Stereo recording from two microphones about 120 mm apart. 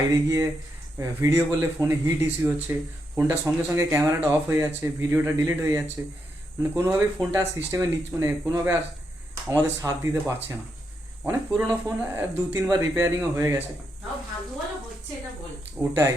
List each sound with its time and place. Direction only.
0.1 s speech: 25° right (ahead or behind)
15.8 s speech: 20° right (ahead or behind)